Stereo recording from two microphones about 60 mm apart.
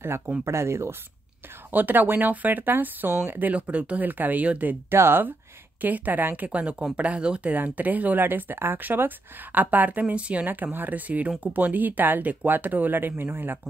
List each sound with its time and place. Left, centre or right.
0.5 s speech: right
1.7 s speech: right
4.9 s speech: right
5.8 s speech: right
7.5 s speech: right
10.4 s speech: right